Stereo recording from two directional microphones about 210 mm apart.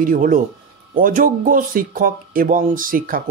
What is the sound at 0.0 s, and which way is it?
Speech, 40° right (ahead or behind).